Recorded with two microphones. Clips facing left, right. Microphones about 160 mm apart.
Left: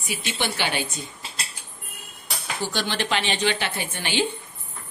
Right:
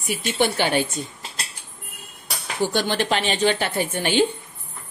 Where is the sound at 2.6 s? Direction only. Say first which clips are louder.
Right 6 dB; 50° right (ahead or behind).